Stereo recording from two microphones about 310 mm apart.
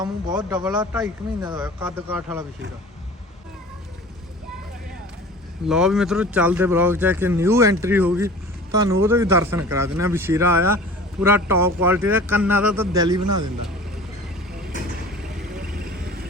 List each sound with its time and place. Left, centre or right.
0.0 s a man's voice: centre
5.6 s a man's voice: centre
15.4 s vehicle: right